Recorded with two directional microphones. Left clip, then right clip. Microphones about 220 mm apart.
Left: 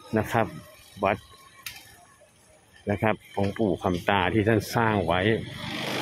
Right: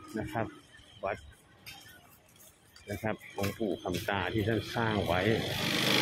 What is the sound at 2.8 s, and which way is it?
Speech, 25° left (ahead or behind).